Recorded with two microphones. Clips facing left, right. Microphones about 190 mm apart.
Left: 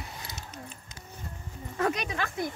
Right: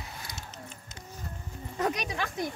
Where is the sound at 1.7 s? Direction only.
10° right (ahead or behind).